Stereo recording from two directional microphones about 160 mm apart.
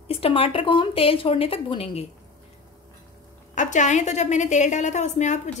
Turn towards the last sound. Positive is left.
turn(degrees=45)  # may be behind; listen again after turning